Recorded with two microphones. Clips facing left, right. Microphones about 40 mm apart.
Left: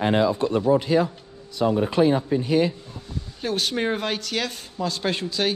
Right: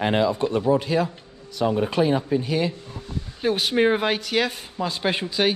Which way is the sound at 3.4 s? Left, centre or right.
Centre.